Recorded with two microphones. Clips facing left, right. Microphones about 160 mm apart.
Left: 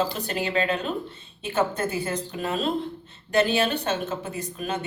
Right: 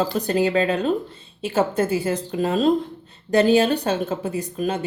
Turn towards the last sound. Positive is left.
turn(degrees=-30)  # may be behind; listen again after turning